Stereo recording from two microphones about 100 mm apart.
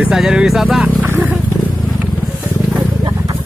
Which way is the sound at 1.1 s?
15° right (ahead or behind).